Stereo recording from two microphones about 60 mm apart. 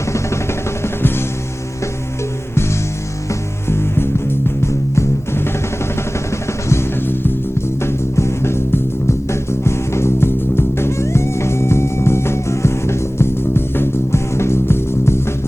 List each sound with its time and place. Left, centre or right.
3.2 s music: left
6.3 s music: left
7.1 s music: left
7.8 s music: left